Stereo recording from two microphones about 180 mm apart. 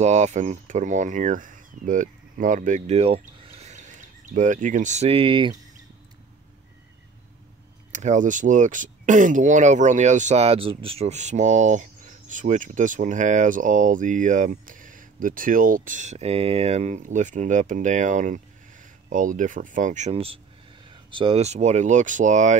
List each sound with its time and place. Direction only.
0.0 s speech: 40° right (ahead or behind)
7.9 s speech: 40° right (ahead or behind)